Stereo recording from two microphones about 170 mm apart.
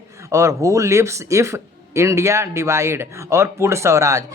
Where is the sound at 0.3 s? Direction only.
15° right (ahead or behind).